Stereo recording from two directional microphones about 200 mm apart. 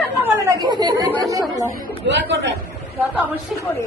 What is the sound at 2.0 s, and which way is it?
Speech, 60° right (ahead or behind).